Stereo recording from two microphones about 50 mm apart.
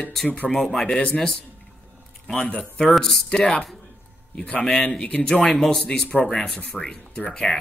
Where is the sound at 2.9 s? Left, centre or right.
Centre.